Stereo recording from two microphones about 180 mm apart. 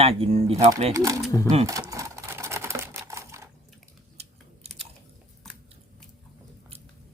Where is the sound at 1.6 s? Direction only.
15° right (ahead or behind).